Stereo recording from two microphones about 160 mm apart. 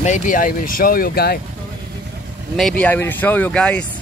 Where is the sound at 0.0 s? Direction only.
50° left (ahead or behind); by 1.4 s 75° left (ahead or behind).